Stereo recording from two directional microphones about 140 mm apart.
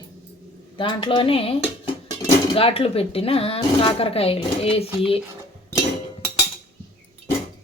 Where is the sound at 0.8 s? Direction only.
40° left (ahead or behind).